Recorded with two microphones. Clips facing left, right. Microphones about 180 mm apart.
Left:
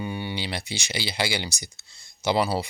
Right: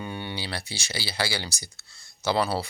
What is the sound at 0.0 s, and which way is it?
Speech, 10° left (ahead or behind).